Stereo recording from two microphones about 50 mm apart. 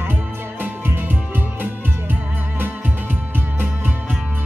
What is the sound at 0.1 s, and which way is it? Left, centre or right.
Music, right.